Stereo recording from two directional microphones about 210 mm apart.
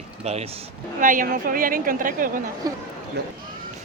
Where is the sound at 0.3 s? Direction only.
30° right (ahead or behind).